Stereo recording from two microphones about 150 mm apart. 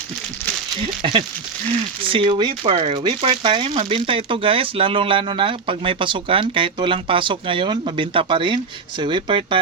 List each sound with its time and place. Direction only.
0.8 s speech: 35° right (ahead or behind)